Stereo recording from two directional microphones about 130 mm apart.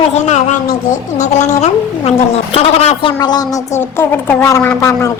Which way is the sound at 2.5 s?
50° left (ahead or behind).